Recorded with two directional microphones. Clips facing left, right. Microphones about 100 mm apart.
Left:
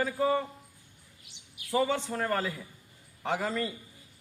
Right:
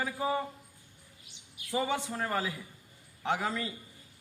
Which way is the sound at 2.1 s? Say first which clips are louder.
Left 3 dB; 5° right (ahead or behind).